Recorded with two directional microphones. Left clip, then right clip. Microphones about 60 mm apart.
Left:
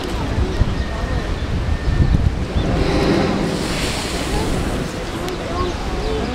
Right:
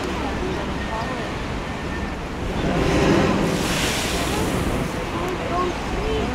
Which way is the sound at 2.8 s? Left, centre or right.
Right.